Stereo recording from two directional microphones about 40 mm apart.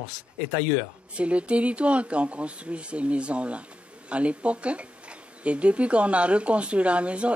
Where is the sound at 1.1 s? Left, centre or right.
Right.